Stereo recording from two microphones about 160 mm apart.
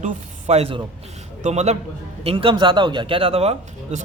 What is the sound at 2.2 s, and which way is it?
A man's voice, 35° right (ahead or behind).